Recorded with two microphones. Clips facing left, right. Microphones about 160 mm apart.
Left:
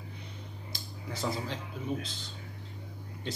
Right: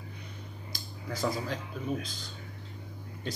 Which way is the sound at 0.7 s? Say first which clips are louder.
Right 3 dB; 25° left (ahead or behind).